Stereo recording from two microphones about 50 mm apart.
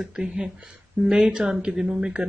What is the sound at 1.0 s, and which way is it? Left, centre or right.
Speech, right.